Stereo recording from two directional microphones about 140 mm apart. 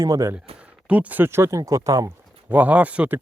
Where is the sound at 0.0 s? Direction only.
25° right (ahead or behind).